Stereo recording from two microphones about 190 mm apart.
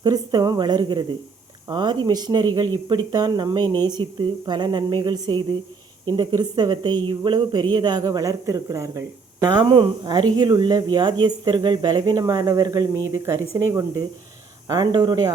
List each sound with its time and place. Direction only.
0.0 s a woman's voice: 20° right (ahead or behind)